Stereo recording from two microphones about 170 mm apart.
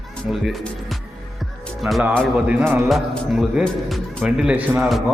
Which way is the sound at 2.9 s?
Centre (ahead or behind).